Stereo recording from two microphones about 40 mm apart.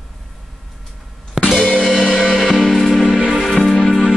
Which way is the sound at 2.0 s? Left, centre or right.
Left.